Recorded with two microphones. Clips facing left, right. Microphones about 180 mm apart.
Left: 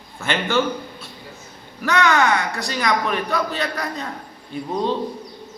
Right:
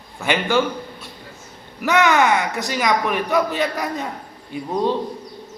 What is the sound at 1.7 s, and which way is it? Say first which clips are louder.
Speech: right 2 dB; 20° right (ahead or behind).